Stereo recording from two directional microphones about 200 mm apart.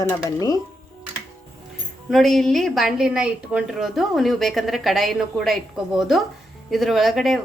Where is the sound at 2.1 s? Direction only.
Centre (ahead or behind).